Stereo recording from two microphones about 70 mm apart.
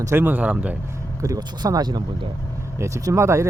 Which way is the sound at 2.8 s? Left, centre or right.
Right.